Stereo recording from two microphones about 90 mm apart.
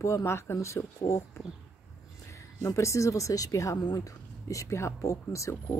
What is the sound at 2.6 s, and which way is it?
Speech, 35° left (ahead or behind).